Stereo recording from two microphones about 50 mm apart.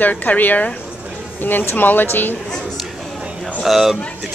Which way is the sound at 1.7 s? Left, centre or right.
Left.